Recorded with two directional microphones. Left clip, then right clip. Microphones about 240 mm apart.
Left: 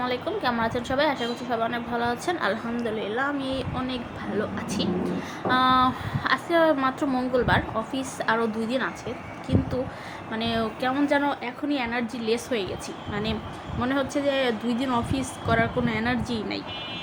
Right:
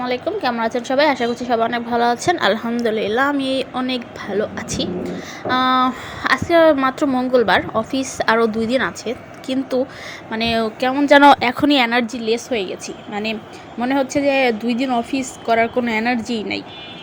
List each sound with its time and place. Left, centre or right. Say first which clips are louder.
0.0 s a woman's voice: right 6 dB; centre; by 12.1 s right
12.1 s a woman's voice: right 6 dB; centre
13.8 s a woman's voice: right 7 dB; right